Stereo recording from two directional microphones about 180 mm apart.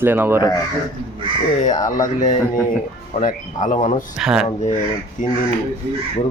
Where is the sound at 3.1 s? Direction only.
45° left (ahead or behind).